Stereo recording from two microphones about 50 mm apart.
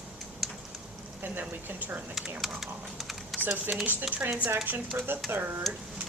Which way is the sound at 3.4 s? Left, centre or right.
Right.